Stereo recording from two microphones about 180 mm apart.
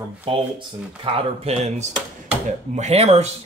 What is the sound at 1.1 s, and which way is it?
Speech, 35° right (ahead or behind).